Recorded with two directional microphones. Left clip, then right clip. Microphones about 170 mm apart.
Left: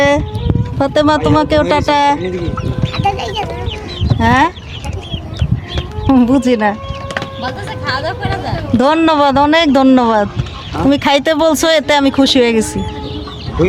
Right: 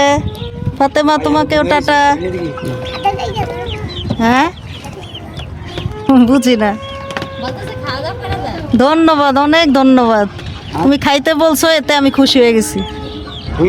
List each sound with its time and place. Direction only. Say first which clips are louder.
0.8 s speech: right 1 dB; 25° right (ahead or behind)
3.1 s a sound: right 1 dB; 5° left (ahead or behind)
4.2 s speech: left 1 dB; 25° right (ahead or behind)
6.1 s speech: right 1 dB; 25° right (ahead or behind)
7.4 s speech: left 1 dB; 5° left (ahead or behind)
8.8 s speech: right 1 dB; 25° right (ahead or behind)